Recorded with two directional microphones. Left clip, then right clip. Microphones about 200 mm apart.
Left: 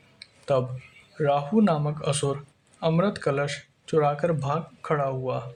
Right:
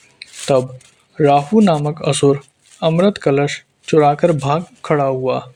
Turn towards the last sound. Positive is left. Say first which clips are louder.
# right 10 dB
turn(degrees=-40)  # may be behind; listen again after turning